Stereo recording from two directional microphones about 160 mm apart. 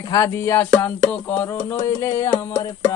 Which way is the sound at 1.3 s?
15° left (ahead or behind).